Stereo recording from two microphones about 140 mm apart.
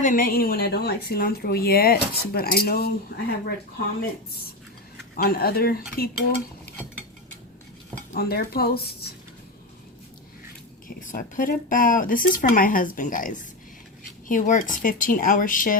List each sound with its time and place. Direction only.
0.0 s a woman's voice: 80° left
5.1 s a woman's voice: 90° left
8.1 s a woman's voice: 90° left
10.8 s speech: 70° left (ahead or behind)